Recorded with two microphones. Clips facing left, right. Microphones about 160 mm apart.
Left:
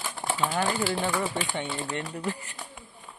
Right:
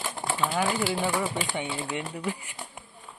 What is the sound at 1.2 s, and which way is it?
Speech, 10° right (ahead or behind).